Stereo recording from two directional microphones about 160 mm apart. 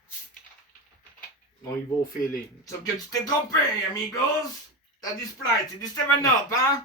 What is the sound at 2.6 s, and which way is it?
A man's voice, 20° left (ahead or behind).